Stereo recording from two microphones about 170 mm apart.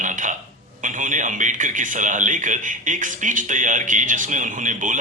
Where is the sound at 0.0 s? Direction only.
50° right (ahead or behind).